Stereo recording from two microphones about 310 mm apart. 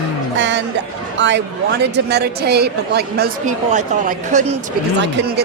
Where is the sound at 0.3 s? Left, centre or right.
Right.